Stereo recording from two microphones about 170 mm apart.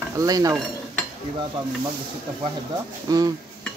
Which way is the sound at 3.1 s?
20° right (ahead or behind).